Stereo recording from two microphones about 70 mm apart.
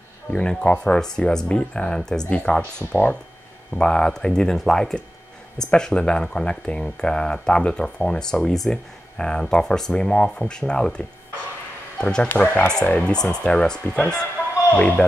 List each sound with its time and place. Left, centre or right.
0.3 s speech: centre
2.9 s speech: left
3.7 s speech: centre
12.0 s speech: centre
12.3 s speech: left